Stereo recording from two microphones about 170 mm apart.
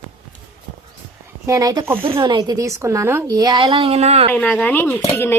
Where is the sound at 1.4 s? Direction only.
20° right (ahead or behind); by 4.3 s 35° right (ahead or behind).